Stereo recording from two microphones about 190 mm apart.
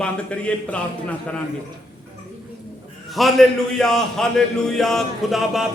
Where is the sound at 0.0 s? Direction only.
5° left (ahead or behind).